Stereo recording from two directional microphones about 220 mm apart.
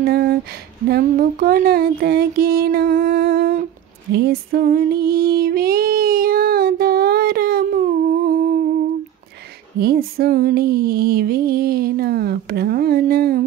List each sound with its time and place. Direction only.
0.0 s a sound: 45° right (ahead or behind)
0.8 s music: 45° right (ahead or behind)
4.1 s female singing: 45° right (ahead or behind)
9.8 s music: 45° right (ahead or behind)